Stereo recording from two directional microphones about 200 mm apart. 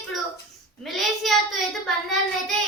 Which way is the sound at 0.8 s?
Centre (ahead or behind).